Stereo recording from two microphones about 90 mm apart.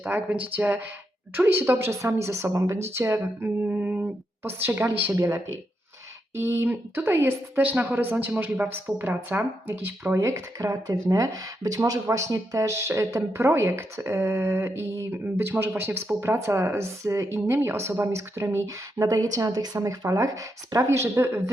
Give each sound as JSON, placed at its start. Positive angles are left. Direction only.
{"t": 0.0, "sound": "speech", "side_deg": -15}
{"t": 10.2, "sound": "speech", "side_deg": -35}